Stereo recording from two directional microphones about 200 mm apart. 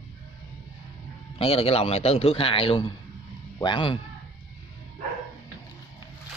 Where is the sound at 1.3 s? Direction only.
30° left (ahead or behind).